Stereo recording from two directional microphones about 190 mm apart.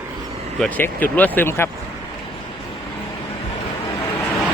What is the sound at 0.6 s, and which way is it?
Speech, 10° left (ahead or behind).